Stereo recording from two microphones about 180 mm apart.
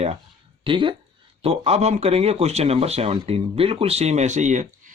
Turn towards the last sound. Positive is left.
turn(degrees=-40)  # may be behind; listen again after turning